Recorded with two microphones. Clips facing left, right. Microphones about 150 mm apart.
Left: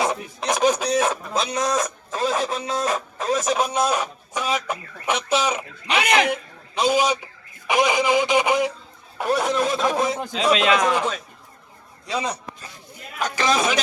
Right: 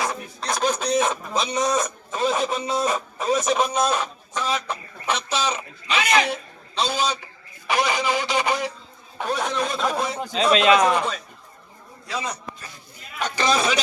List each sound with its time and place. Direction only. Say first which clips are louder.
0.0 s a sound: left 4 dB; 20° left (ahead or behind); by 3.0 s 5° right (ahead or behind)
3.2 s a man's voice: right 1 dB; centre (ahead or behind)
9.1 s speech: left 4 dB; 5° left (ahead or behind)
12.0 s a man's voice: left 3 dB; 20° left (ahead or behind)
13.1 s speech: left 1 dB; 5° left (ahead or behind)